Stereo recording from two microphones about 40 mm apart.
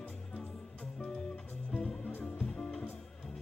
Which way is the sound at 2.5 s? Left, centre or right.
Centre.